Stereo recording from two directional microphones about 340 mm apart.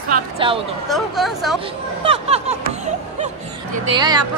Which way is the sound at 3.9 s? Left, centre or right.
Centre.